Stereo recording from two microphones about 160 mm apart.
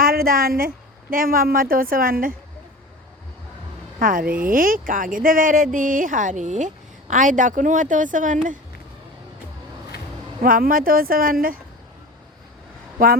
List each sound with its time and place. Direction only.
0.0 s a woman's voice: 65° right (ahead or behind)
4.0 s a woman's voice: 60° right (ahead or behind)
10.4 s a woman's voice: 60° right (ahead or behind)